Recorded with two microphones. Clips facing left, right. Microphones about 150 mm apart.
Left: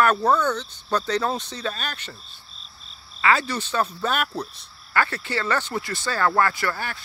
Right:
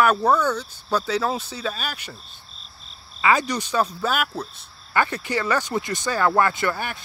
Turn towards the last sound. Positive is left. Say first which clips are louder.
# right 2 dB
turn(degrees=-20)  # may be behind; listen again after turning